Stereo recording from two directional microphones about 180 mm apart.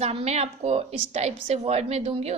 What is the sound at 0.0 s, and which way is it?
A woman's voice, 35° right (ahead or behind).